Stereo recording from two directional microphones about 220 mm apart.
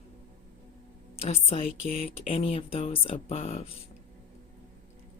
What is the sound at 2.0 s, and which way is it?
Speech, 25° left (ahead or behind).